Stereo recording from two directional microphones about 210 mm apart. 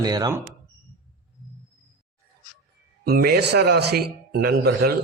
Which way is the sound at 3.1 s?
50° right (ahead or behind).